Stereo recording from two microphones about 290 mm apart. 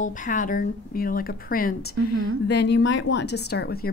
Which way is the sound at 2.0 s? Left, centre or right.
Right.